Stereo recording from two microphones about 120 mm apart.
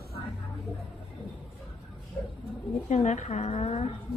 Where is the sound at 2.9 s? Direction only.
70° left (ahead or behind).